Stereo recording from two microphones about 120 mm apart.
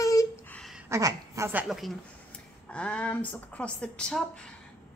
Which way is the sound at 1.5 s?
5° right (ahead or behind).